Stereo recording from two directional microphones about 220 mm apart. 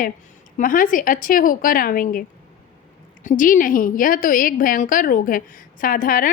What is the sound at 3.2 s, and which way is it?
A woman's voice, 35° left (ahead or behind).